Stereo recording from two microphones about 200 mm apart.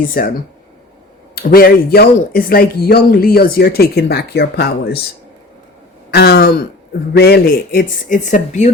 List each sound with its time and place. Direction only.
0.0 s speech: 45° left (ahead or behind)
1.4 s speech: 50° left (ahead or behind)
6.1 s throat clearing: 55° left (ahead or behind)
7.2 s speech: 50° left (ahead or behind)